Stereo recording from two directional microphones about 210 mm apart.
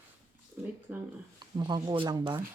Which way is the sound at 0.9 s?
5° right (ahead or behind).